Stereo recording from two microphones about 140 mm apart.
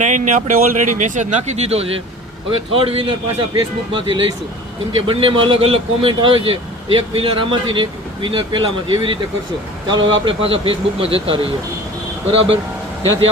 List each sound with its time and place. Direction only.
0.0 s speech: 60° right (ahead or behind); by 12.5 s 40° right (ahead or behind)